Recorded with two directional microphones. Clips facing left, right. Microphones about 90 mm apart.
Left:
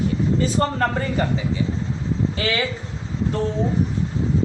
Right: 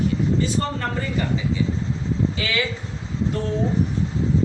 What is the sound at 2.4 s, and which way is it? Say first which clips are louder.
Speech: left 4 dB; 45° left (ahead or behind).